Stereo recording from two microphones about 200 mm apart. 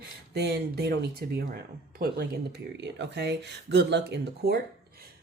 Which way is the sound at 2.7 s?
60° right (ahead or behind).